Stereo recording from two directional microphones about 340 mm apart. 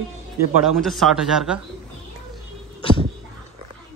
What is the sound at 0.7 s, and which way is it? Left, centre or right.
Speech, centre.